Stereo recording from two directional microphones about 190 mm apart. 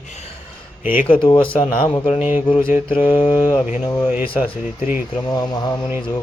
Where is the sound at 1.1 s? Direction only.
25° left (ahead or behind).